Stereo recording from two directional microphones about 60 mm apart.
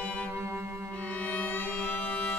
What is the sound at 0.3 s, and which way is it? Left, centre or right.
Music, right.